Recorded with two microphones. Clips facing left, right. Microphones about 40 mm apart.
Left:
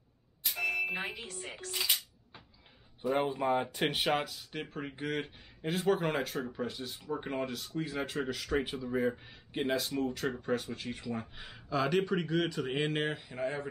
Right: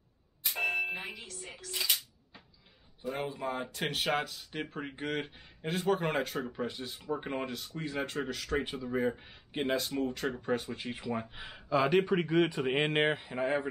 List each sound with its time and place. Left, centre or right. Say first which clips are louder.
0.6 s a sound: right 1 dB; right
1.1 s speech: left 3 dB; left
1.7 s speech: even; centre
3.1 s speech: left 6 dB; left; by 13.7 s right